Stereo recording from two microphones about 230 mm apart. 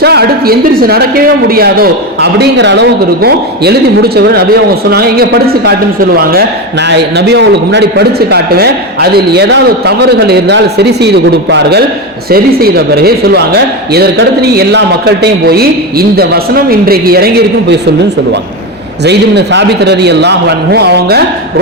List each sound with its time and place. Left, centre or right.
0.0 s a man's voice: right
19.0 s a man's voice: right